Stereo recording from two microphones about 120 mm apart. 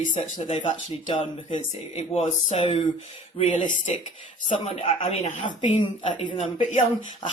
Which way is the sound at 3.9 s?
60° left (ahead or behind).